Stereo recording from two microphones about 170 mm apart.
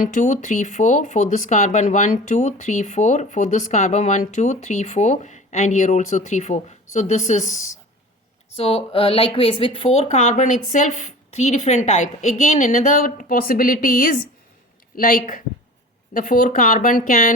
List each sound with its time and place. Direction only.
0.0 s a woman's voice: 45° left (ahead or behind)